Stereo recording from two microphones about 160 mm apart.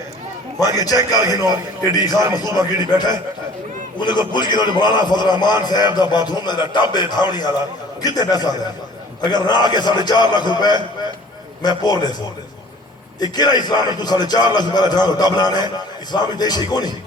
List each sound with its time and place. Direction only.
0.6 s a man's voice: 25° left (ahead or behind)
3.9 s a man's voice: 30° left (ahead or behind)
13.1 s a man's voice: 25° left (ahead or behind)